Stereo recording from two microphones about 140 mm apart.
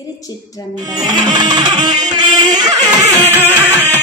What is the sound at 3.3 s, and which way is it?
Music, 15° right (ahead or behind).